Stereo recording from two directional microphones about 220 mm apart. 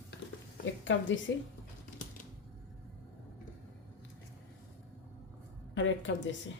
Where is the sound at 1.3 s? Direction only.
55° left (ahead or behind).